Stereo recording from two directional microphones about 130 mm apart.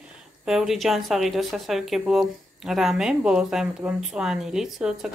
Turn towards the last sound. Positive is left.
turn(degrees=-5)  # may be behind; listen again after turning